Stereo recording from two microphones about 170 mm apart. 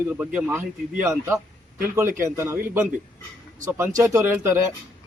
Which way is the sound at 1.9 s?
15° right (ahead or behind).